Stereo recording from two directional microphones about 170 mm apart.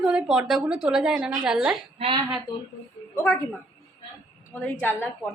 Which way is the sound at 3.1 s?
15° left (ahead or behind).